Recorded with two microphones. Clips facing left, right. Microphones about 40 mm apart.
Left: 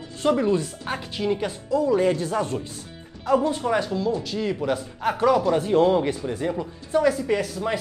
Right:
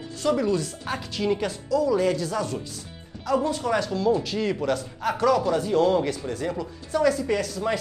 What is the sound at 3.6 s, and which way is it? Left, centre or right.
Speech, centre.